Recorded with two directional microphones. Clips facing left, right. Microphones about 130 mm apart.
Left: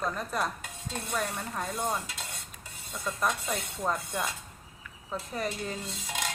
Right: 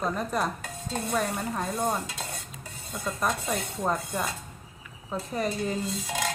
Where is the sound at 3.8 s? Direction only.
10° right (ahead or behind).